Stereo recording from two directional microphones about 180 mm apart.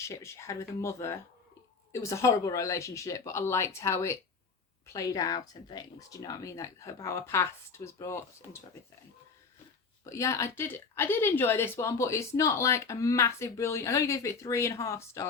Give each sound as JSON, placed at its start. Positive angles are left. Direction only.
{"t": 0.0, "sound": "a woman's voice", "side_deg": 15}
{"t": 10.0, "sound": "a woman's voice", "side_deg": 15}